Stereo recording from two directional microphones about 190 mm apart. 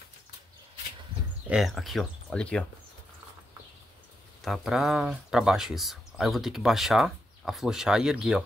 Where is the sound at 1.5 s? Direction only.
Centre (ahead or behind).